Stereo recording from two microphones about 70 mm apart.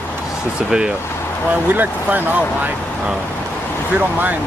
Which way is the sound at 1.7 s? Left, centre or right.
Right.